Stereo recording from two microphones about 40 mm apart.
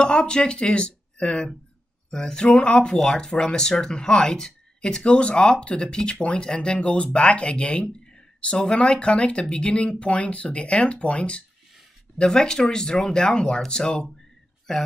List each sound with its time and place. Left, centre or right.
0.0 s speech: left
12.2 s speech: centre